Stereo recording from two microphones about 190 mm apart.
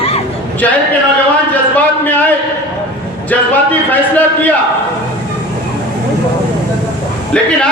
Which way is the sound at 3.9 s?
10° left (ahead or behind).